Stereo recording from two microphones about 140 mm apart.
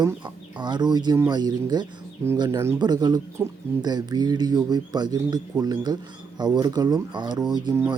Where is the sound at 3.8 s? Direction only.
30° right (ahead or behind).